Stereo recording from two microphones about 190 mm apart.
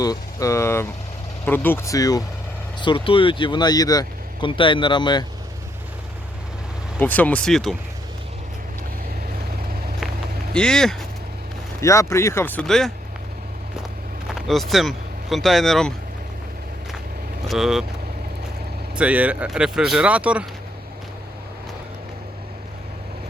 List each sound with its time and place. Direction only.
0.0 s speech: 20° left (ahead or behind)
7.0 s speech: 10° left (ahead or behind)
10.5 s speech: 5° left (ahead or behind)
11.8 s speech: 15° left (ahead or behind)
14.3 s speech: centre (ahead or behind)
17.5 s speech: centre (ahead or behind)
18.9 s speech: 5° right (ahead or behind)